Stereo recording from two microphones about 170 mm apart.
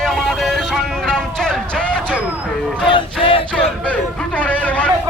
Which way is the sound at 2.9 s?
30° left (ahead or behind).